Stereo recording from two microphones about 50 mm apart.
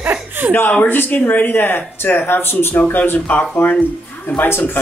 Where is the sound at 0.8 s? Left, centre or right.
Left.